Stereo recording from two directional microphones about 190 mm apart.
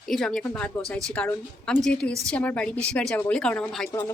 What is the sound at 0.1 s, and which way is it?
A woman's voice, centre (ahead or behind).